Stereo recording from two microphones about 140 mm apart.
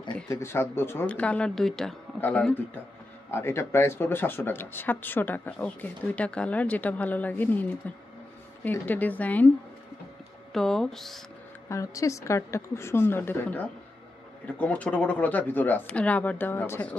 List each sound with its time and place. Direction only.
0.3 s speech: 20° left (ahead or behind)
10.5 s speech: 5° left (ahead or behind)
11.7 s a woman's voice: 25° left (ahead or behind)